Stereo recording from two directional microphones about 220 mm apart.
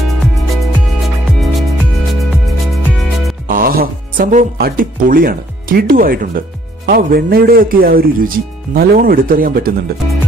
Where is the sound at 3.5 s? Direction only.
40° right (ahead or behind).